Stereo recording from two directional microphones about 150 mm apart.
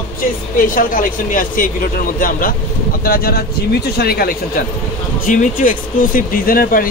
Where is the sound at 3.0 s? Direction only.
85° left.